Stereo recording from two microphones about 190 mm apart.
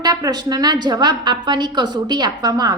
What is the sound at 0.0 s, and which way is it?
A woman's voice, 20° right (ahead or behind).